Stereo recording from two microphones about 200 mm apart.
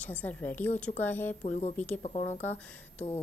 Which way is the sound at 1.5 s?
35° left (ahead or behind).